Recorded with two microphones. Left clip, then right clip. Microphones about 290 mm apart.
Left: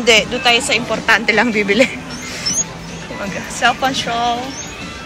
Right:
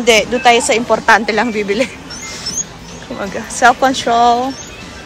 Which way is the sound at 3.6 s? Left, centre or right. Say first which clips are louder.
Right 5 dB; right.